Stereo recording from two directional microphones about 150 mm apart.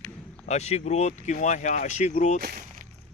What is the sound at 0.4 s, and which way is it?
Speech, 45° left (ahead or behind).